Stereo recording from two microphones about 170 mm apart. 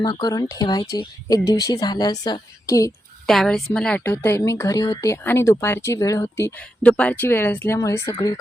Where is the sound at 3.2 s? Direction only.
Centre (ahead or behind).